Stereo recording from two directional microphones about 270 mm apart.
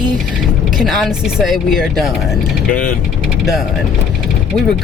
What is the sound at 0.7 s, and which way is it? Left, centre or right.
Speech, centre.